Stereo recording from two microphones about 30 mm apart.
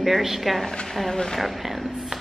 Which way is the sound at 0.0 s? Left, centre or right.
Centre.